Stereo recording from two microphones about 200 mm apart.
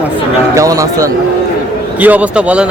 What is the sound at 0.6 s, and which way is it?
Speech, 15° right (ahead or behind).